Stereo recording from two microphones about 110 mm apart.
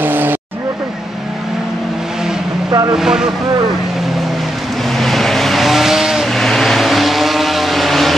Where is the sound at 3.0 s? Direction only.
5° right (ahead or behind).